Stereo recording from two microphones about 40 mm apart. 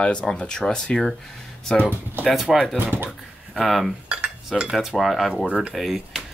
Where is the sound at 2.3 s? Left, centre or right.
Centre.